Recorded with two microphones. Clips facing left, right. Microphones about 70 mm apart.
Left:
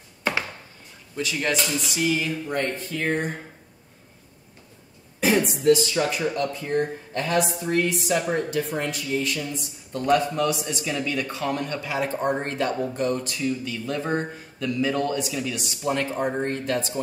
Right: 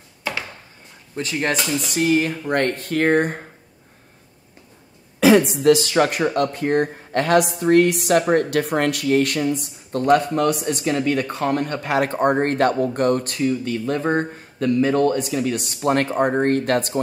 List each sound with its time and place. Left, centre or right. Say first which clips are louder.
1.1 s speech: right 3 dB; right
5.2 s speech: right 7 dB; right